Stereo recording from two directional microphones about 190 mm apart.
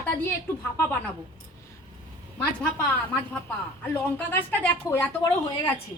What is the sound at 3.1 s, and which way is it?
A woman's voice, 10° left (ahead or behind).